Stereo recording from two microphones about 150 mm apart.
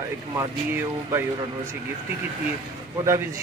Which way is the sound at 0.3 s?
20° right (ahead or behind).